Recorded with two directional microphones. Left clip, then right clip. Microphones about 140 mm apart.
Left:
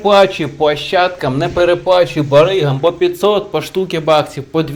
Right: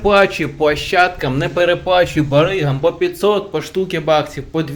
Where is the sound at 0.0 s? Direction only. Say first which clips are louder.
Left 3 dB; 10° right (ahead or behind).